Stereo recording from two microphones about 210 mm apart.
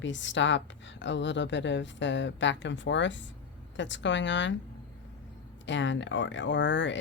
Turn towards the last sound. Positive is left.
turn(degrees=60)  # may be behind; listen again after turning